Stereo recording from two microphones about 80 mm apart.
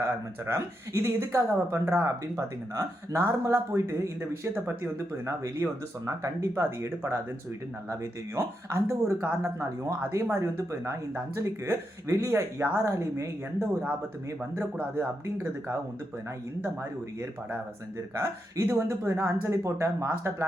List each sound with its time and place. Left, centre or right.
0.0 s speech: right
8.4 s speech: right
18.2 s speech: right